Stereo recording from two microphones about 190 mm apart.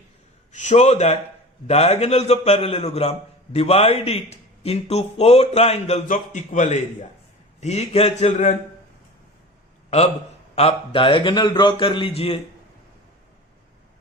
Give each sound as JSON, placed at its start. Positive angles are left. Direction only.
{"t": 0.5, "sound": "a man's voice", "side_deg": 40}
{"t": 10.5, "sound": "a man's voice", "side_deg": 35}